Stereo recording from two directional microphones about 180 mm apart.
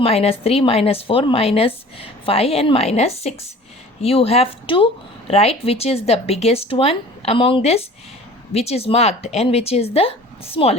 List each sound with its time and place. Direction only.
0.0 s a woman's voice: 35° left (ahead or behind)